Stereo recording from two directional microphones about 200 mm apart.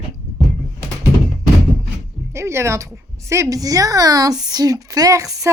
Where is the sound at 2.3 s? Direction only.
15° right (ahead or behind).